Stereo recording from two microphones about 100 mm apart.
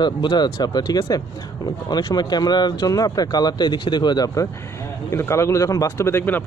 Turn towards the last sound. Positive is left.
turn(degrees=20)  # may be behind; listen again after turning